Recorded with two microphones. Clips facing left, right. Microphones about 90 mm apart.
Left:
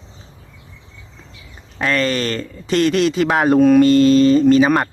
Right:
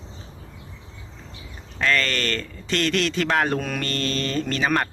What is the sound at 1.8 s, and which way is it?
Speech, 15° left (ahead or behind).